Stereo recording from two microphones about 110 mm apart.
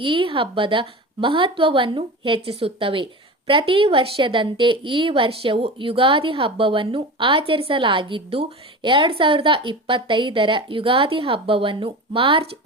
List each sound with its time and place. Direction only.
0.0 s a woman's voice: 50° right (ahead or behind)
8.8 s a woman's voice: 50° right (ahead or behind)